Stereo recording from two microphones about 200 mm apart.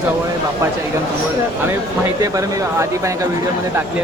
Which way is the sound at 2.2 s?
15° right (ahead or behind).